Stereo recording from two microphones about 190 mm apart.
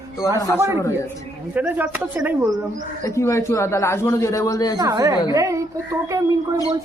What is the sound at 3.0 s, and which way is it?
A man's voice, 15° left (ahead or behind).